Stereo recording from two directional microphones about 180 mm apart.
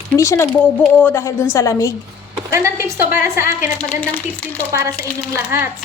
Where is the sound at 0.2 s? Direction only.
15° left (ahead or behind).